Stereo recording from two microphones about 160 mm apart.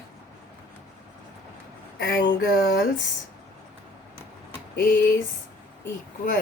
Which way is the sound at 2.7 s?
75° left (ahead or behind).